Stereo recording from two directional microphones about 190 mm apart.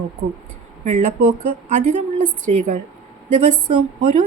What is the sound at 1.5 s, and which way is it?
Speech, 40° right (ahead or behind).